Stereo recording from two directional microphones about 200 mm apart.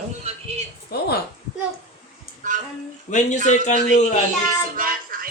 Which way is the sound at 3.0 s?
40° left (ahead or behind).